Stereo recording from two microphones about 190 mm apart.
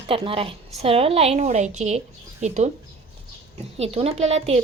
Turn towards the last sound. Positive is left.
turn(degrees=-35)  # may be behind; listen again after turning